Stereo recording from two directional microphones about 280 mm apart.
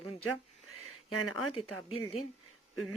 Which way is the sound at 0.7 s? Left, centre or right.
Left.